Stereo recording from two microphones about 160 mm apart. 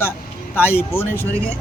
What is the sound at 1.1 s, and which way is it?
Speech, 15° right (ahead or behind).